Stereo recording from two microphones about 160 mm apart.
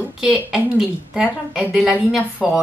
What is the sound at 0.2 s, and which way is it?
A woman's voice, 5° right (ahead or behind).